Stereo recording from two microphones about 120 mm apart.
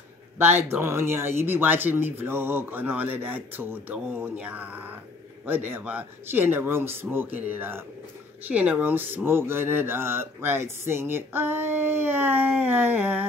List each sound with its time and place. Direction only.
0.4 s speech: 20° right (ahead or behind)